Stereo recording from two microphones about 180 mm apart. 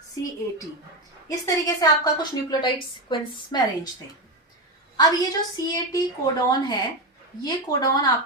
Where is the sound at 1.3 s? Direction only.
20° left (ahead or behind).